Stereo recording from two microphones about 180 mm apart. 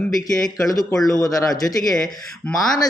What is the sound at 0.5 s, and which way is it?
Speech, 20° left (ahead or behind).